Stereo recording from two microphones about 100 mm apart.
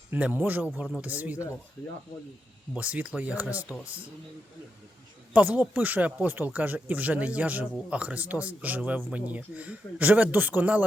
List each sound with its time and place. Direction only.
0.1 s speech: 15° right (ahead or behind)
2.7 s speech: 15° right (ahead or behind)
5.3 s speech: 15° right (ahead or behind)